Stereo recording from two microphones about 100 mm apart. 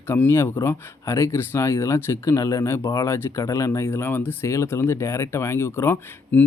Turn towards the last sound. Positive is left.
turn(degrees=20)  # may be behind; listen again after turning